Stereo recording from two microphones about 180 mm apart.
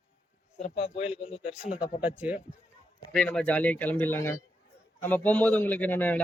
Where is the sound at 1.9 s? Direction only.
45° left (ahead or behind).